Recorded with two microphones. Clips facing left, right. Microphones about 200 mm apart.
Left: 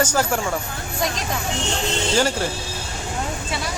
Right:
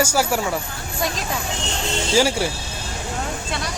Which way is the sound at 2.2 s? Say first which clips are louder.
Right 3 dB; 10° right (ahead or behind).